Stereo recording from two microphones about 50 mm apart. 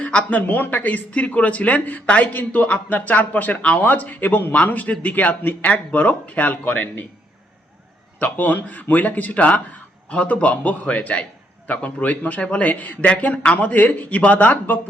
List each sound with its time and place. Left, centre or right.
0.0 s a sound: left
0.3 s speech: left
8.2 s speech: left